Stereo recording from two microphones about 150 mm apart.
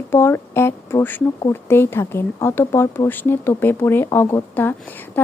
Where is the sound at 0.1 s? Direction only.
15° left (ahead or behind).